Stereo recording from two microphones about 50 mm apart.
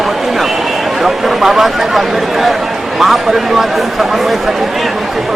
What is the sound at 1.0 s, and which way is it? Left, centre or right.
Speech, centre.